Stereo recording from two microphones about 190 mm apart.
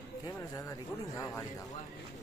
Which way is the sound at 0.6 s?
15° left (ahead or behind).